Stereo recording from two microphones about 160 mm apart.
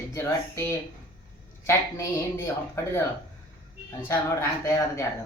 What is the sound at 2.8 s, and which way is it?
Speech, 15° left (ahead or behind).